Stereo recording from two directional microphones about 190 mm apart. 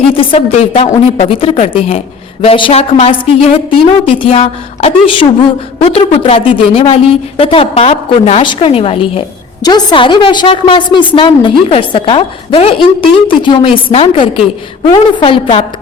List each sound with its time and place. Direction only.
0.2 s a woman's voice: 30° left (ahead or behind)